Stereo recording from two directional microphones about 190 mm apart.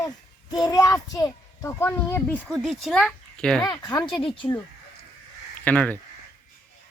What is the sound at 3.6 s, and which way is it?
Speech, 20° left (ahead or behind).